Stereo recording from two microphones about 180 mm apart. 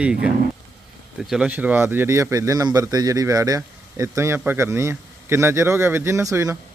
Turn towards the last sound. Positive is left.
turn(degrees=-20)  # may be behind; listen again after turning